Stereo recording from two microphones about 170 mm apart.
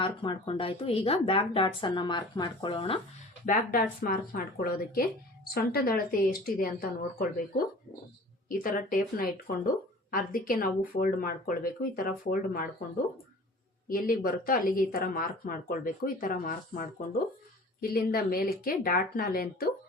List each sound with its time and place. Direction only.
0.0 s speech: 30° left (ahead or behind)
3.4 s speech: 50° left (ahead or behind)
13.8 s speech: 55° left (ahead or behind)